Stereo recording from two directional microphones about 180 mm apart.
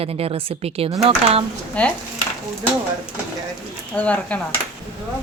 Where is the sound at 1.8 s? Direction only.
10° left (ahead or behind).